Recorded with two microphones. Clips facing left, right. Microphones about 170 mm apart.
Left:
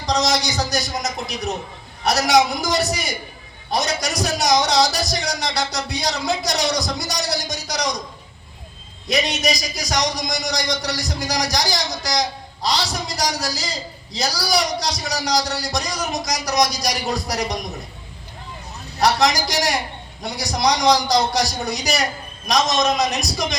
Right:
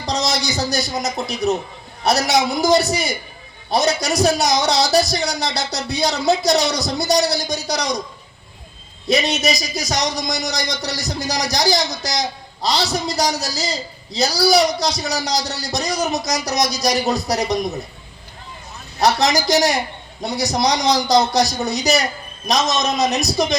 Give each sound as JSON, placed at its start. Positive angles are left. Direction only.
{"t": 0.0, "sound": "a man's voice", "side_deg": -25}
{"t": 2.6, "sound": "a man's voice", "side_deg": -30}
{"t": 9.0, "sound": "a man's voice", "side_deg": -25}
{"t": 18.9, "sound": "a man's voice", "side_deg": -25}